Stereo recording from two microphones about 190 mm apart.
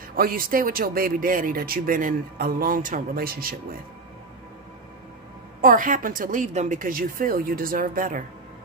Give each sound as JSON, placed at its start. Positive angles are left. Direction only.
{"t": 0.1, "sound": "speech", "side_deg": -50}
{"t": 5.6, "sound": "speech", "side_deg": -45}